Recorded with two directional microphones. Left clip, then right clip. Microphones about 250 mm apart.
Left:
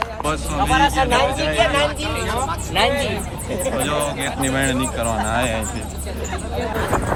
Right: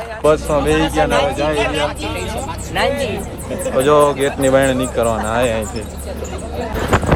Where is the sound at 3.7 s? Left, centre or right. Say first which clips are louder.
Right 13 dB; centre.